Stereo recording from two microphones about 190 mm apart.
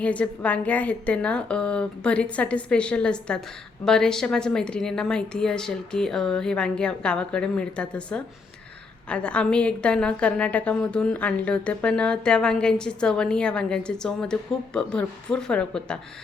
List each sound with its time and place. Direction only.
0.0 s a woman's voice: 5° left (ahead or behind)